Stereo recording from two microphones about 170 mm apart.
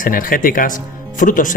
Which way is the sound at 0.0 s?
55° left (ahead or behind).